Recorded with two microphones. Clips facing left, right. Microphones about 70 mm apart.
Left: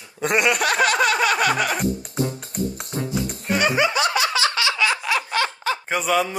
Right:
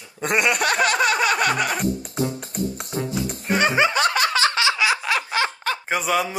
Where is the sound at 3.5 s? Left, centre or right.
Right.